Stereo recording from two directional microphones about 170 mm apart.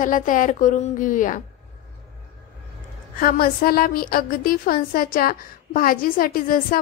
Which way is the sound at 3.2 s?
60° left (ahead or behind).